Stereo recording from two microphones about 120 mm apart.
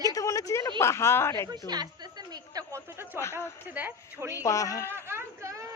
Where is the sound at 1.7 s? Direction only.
35° right (ahead or behind).